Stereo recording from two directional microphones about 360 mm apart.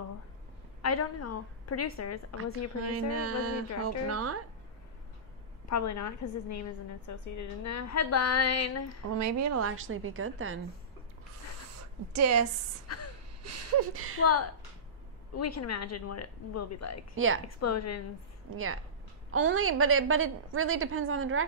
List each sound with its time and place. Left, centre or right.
0.8 s a woman's voice: left
2.9 s a woman's voice: right
5.7 s a woman's voice: left
9.2 s a woman's voice: right
12.2 s a woman's voice: right
12.9 s speech: left
13.4 s speech: right
14.2 s a woman's voice: left
17.1 s a woman's voice: right
17.5 s a woman's voice: left
18.5 s a woman's voice: right
19.3 s a woman's voice: right